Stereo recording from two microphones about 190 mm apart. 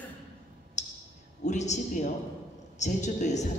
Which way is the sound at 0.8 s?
40° left (ahead or behind).